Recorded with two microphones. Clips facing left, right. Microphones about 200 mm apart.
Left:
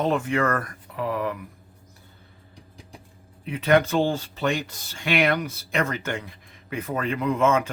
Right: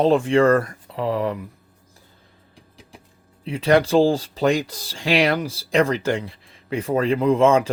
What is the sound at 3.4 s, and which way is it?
Speech, 30° right (ahead or behind).